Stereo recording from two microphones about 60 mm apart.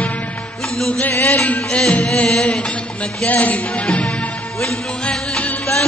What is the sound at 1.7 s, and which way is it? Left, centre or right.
Music, centre.